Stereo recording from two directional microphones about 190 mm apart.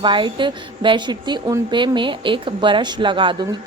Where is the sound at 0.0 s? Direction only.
25° right (ahead or behind).